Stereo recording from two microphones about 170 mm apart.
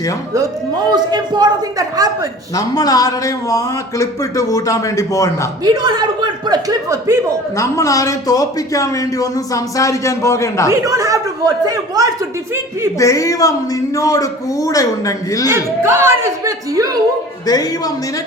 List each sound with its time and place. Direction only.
0.9 s a man's voice: 25° right (ahead or behind)
2.6 s a man's voice: 20° left (ahead or behind)
5.6 s a man's voice: 25° right (ahead or behind)
7.5 s a man's voice: 15° left (ahead or behind)
10.7 s a man's voice: 20° right (ahead or behind)
13.0 s a man's voice: 20° left (ahead or behind)
15.4 s speech: 15° right (ahead or behind)
17.4 s a man's voice: 20° left (ahead or behind)